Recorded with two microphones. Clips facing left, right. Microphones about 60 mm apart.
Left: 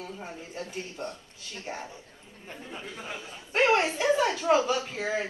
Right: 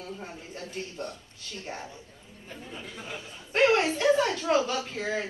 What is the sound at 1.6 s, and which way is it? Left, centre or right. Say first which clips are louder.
Speech: left 1 dB; centre.